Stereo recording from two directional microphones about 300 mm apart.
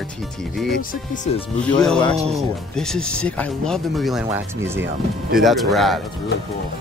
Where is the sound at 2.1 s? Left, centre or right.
Right.